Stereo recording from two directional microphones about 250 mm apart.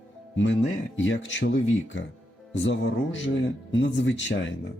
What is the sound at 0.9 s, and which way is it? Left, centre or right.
Speech, left.